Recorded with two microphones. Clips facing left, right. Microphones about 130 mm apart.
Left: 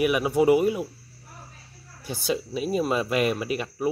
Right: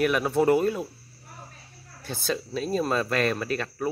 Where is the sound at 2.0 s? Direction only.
15° left (ahead or behind).